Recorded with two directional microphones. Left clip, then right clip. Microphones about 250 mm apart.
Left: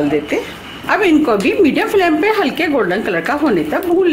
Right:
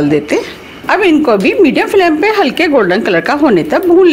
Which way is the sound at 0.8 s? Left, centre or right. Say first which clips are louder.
Right 4 dB; right.